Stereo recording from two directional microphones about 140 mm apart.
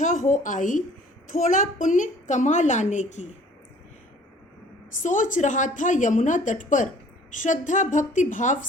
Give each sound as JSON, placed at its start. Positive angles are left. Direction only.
{"t": 0.0, "sound": "a woman's voice", "side_deg": 65}
{"t": 5.0, "sound": "a woman's voice", "side_deg": 65}